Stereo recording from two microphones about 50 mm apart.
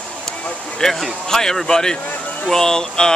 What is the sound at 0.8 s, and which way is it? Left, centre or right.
Speech, centre.